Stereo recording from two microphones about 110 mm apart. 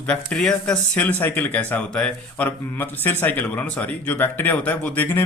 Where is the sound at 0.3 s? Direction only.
10° left (ahead or behind).